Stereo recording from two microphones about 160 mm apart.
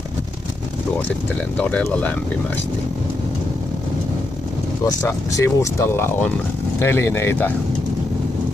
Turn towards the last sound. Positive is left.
turn(degrees=10)  # may be behind; listen again after turning